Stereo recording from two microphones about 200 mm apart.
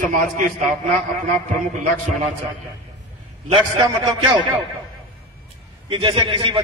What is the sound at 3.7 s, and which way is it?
Speech, 20° right (ahead or behind).